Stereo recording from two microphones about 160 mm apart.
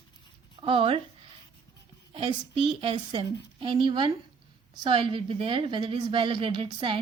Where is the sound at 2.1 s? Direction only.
35° right (ahead or behind).